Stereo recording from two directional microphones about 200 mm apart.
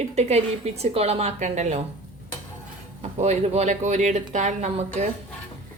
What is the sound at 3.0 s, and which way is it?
A woman's voice, 35° right (ahead or behind).